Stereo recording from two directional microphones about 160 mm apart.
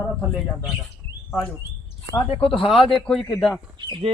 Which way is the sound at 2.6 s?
35° left (ahead or behind).